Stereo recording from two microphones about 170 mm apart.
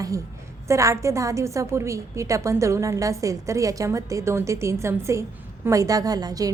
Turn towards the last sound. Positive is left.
turn(degrees=-20)  # may be behind; listen again after turning